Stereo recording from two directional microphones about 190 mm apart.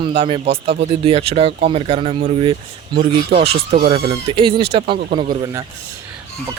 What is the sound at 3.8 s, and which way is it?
Speech, 30° right (ahead or behind).